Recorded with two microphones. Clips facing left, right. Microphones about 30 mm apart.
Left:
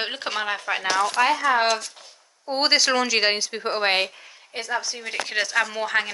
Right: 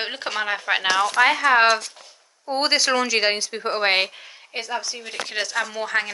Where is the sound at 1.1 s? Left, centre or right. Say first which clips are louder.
Right 4 dB; right.